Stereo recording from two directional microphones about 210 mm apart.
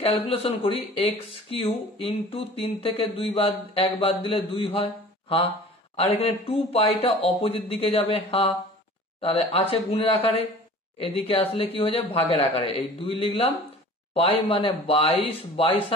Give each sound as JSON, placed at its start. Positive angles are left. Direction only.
{"t": 0.3, "sound": "speech", "side_deg": 25}